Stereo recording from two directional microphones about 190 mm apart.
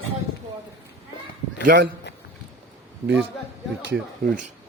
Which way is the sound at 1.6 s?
60° right (ahead or behind).